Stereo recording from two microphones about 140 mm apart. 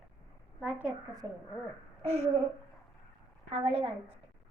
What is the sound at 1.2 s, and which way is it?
Speech, 20° right (ahead or behind).